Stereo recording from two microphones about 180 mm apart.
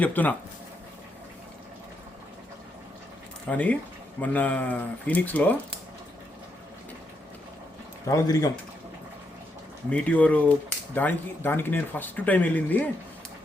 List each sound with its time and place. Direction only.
0.0 s speech: 10° left (ahead or behind)
3.5 s speech: 10° left (ahead or behind)
8.1 s speech: 20° left (ahead or behind)
9.9 s speech: 10° left (ahead or behind)